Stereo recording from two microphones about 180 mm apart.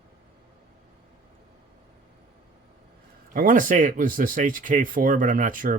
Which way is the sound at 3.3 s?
50° right (ahead or behind).